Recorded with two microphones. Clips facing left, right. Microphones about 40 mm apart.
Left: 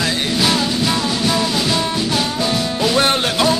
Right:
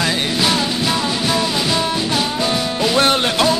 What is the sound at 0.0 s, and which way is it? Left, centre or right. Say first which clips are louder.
Music: even; centre.